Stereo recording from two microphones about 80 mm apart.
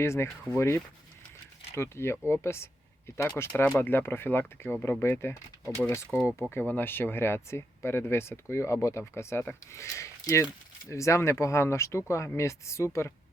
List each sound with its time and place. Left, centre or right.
0.0 s speech: left
3.4 s speech: left
9.8 s speech: left